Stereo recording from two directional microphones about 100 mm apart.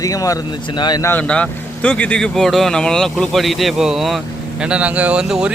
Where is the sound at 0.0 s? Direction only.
35° left (ahead or behind).